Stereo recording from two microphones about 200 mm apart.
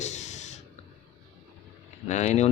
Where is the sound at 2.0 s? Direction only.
35° left (ahead or behind).